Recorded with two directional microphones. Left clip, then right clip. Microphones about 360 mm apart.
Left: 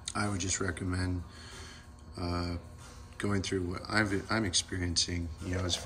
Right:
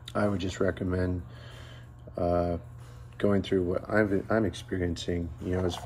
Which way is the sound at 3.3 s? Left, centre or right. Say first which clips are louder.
Right 7 dB; centre.